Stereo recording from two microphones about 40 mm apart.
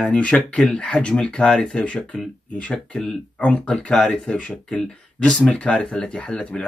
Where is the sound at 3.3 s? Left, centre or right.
Left.